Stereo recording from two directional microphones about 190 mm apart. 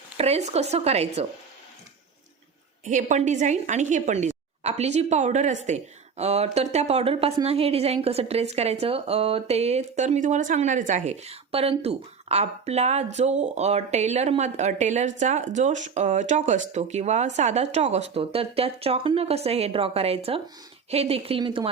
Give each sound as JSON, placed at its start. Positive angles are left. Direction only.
{"t": 0.2, "sound": "a woman's voice", "side_deg": -35}
{"t": 2.8, "sound": "a woman's voice", "side_deg": -40}